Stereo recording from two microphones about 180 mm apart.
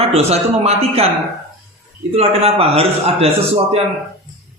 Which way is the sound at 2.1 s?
35° right (ahead or behind).